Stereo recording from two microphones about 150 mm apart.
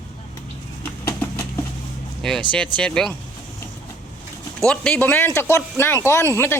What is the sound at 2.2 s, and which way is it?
Speech, 5° left (ahead or behind).